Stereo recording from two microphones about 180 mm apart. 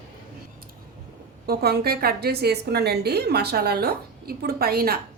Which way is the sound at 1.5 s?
60° right (ahead or behind).